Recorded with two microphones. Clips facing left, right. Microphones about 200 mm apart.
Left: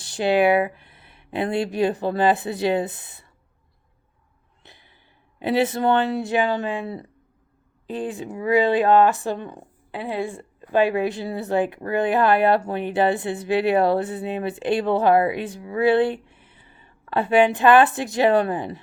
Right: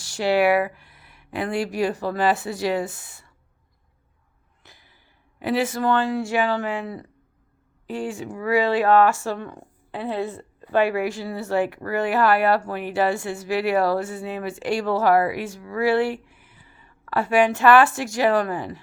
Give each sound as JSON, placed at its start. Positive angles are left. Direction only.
{"t": 0.0, "sound": "speech", "side_deg": 20}
{"t": 4.6, "sound": "a sound", "side_deg": 20}
{"t": 5.4, "sound": "speech", "side_deg": 20}